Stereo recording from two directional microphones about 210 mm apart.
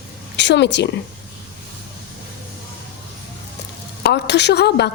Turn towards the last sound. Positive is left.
turn(degrees=50)  # may be behind; listen again after turning